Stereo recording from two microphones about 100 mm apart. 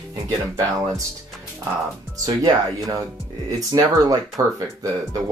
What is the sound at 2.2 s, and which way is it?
Speech, 35° right (ahead or behind).